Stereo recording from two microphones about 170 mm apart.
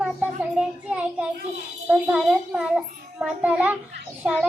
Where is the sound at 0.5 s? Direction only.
5° right (ahead or behind).